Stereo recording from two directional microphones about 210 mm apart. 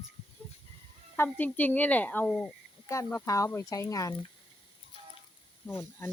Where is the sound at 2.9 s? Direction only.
15° left (ahead or behind).